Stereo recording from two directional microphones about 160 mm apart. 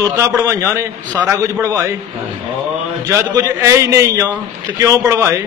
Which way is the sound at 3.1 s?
20° right (ahead or behind).